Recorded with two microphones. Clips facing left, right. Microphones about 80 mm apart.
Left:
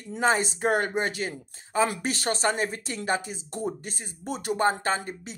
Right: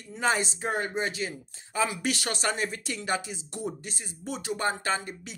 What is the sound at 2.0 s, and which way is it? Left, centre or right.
Speech, left.